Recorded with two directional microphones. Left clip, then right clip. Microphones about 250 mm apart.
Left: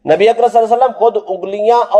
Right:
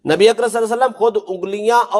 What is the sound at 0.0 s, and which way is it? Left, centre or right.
A man's voice, right.